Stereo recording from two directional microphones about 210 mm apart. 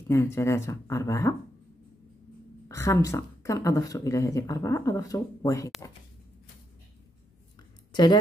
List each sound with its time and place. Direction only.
0.1 s speech: 15° left (ahead or behind)
2.7 s speech: 15° left (ahead or behind)
7.9 s speech: 20° left (ahead or behind)